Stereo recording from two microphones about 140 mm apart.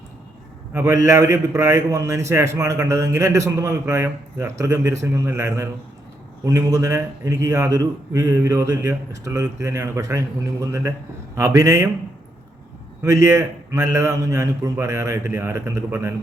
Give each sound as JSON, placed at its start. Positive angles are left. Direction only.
{"t": 0.7, "sound": "a man's voice", "side_deg": -20}
{"t": 13.0, "sound": "a man's voice", "side_deg": -20}